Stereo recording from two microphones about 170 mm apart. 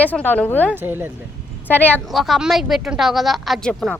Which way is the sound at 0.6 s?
10° right (ahead or behind).